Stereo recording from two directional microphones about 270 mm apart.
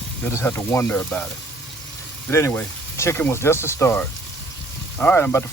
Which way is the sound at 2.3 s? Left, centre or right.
Centre.